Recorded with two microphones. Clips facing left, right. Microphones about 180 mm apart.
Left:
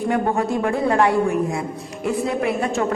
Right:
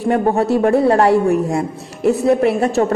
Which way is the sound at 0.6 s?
40° right (ahead or behind).